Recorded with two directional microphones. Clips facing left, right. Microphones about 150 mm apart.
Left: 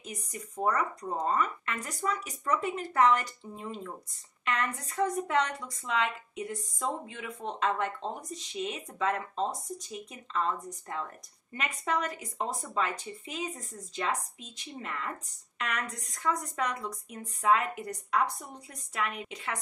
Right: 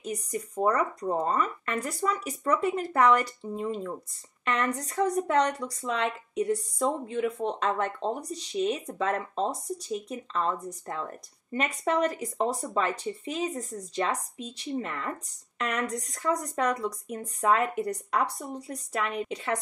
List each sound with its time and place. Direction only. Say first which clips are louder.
0.0 s speech: right 9 dB; 35° right (ahead or behind)